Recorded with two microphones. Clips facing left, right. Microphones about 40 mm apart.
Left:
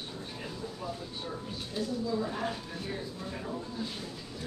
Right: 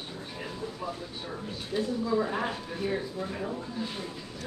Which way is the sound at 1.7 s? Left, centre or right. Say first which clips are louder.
Right 5 dB; centre.